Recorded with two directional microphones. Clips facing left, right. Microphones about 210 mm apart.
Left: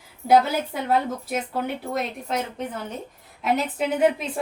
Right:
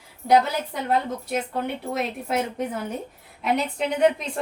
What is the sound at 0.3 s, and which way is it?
A woman's voice, 5° left (ahead or behind).